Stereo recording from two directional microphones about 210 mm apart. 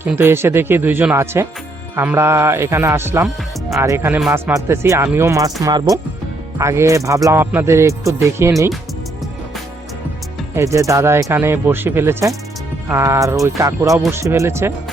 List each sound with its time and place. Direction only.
0.0 s speech: 10° right (ahead or behind)
10.5 s speech: 15° right (ahead or behind)